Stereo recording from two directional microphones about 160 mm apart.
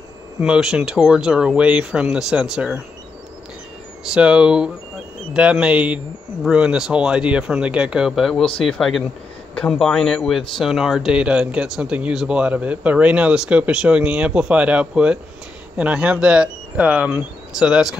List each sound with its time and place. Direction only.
0.4 s speech: 5° right (ahead or behind)
4.1 s speech: 5° right (ahead or behind)